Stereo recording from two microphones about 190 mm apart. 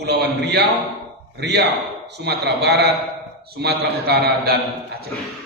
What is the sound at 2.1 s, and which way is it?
A man's voice, 60° right (ahead or behind).